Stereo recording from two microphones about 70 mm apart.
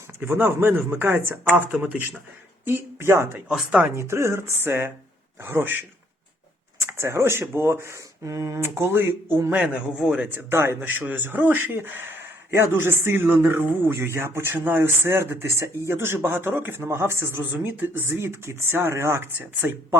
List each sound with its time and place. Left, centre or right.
0.2 s speech: right
3.5 s speech: centre
3.8 s speech: right
6.8 s speech: right
8.7 s speech: right
9.5 s speech: right
19.6 s speech: right